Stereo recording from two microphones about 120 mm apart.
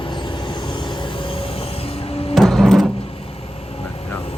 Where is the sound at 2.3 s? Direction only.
Centre (ahead or behind).